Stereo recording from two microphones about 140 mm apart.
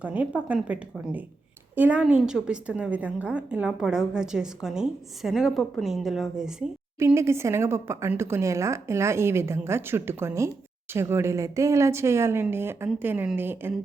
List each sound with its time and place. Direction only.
0.0 s a woman's voice: 10° right (ahead or behind)
7.0 s a woman's voice: 20° right (ahead or behind)